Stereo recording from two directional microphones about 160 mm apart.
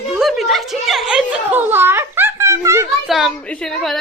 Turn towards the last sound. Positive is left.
turn(degrees=5)  # may be behind; listen again after turning